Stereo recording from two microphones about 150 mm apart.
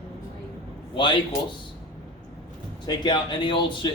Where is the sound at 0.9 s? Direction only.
30° left (ahead or behind).